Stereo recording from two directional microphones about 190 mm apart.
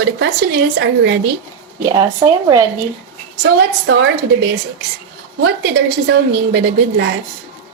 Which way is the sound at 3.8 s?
60° right (ahead or behind).